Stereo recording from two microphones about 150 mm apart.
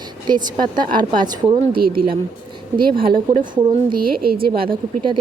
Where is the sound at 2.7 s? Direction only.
35° right (ahead or behind).